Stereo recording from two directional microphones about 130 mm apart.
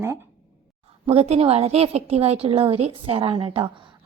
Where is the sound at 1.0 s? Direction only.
50° right (ahead or behind).